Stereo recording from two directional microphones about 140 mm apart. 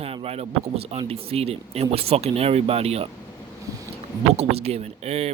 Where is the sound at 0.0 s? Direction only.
45° right (ahead or behind).